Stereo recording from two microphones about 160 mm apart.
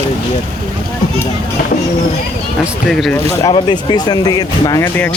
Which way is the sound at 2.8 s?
5° left (ahead or behind).